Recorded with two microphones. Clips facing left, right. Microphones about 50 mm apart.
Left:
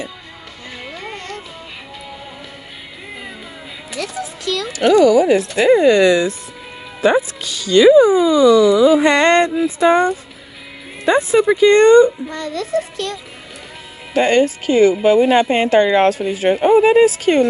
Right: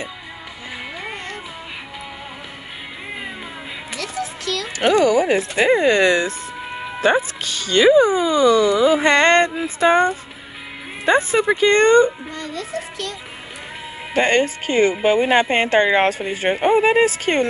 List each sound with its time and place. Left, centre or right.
0.9 s music: centre
4.7 s speech: right
12.3 s a child's voice: left
14.1 s speech: right